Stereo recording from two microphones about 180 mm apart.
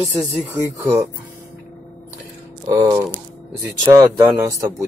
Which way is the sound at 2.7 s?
20° right (ahead or behind).